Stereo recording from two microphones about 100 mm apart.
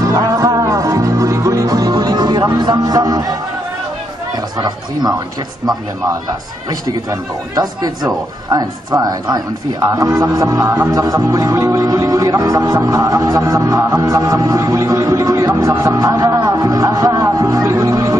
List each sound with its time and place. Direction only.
0.0 s music: 35° right (ahead or behind)
6.9 s speech: 40° right (ahead or behind)
10.9 s music: 35° right (ahead or behind)